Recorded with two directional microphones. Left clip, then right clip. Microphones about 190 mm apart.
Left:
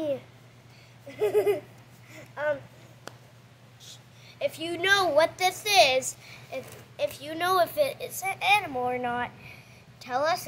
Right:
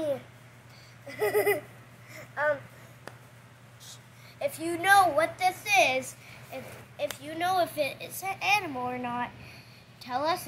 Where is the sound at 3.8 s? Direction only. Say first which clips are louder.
Left 1 dB; 45° left (ahead or behind).